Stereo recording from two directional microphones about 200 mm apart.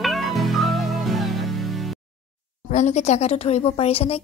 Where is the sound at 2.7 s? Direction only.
35° left (ahead or behind).